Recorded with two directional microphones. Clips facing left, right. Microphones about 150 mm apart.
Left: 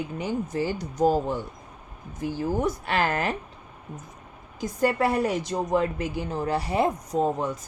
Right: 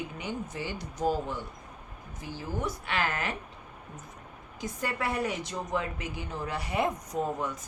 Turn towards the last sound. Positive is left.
turn(degrees=30)  # may be behind; listen again after turning